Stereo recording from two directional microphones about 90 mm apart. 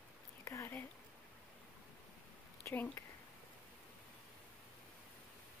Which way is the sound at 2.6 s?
20° left (ahead or behind).